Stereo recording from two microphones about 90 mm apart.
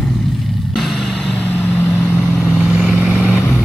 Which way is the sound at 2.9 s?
20° right (ahead or behind).